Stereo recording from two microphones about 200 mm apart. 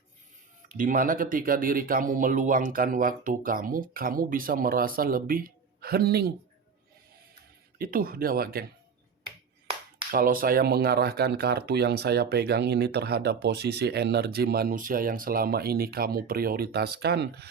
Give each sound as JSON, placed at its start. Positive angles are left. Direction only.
{"t": 0.7, "sound": "speech", "side_deg": -40}
{"t": 7.8, "sound": "speech", "side_deg": -45}
{"t": 10.1, "sound": "speech", "side_deg": -45}